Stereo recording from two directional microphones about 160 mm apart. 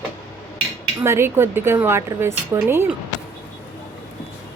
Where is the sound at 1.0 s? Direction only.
15° right (ahead or behind).